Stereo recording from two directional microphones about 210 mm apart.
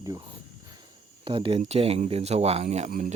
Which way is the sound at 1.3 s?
25° right (ahead or behind).